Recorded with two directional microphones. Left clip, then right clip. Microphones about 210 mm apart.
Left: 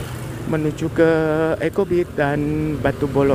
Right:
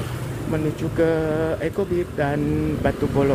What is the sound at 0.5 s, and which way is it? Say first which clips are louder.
Speech: left 4 dB; 20° left (ahead or behind).